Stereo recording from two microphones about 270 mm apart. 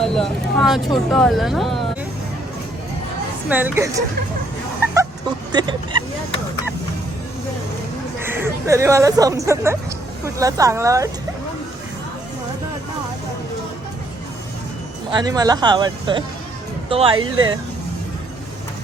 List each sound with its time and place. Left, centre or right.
0.0 s speech: centre
3.5 s speech: centre
5.5 s speech: centre
8.2 s speech: centre
15.1 s speech: centre